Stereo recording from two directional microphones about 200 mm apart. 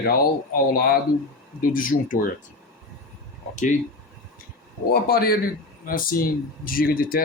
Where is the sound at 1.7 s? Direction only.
45° left (ahead or behind).